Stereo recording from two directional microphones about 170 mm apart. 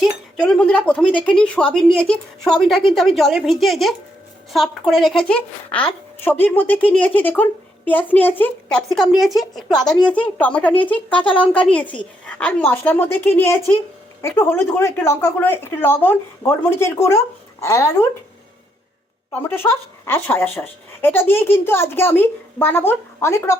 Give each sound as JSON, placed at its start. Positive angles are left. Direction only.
{"t": 0.0, "sound": "a woman's voice", "side_deg": 5}
{"t": 8.9, "sound": "a woman's voice", "side_deg": 0}
{"t": 19.3, "sound": "a woman's voice", "side_deg": 10}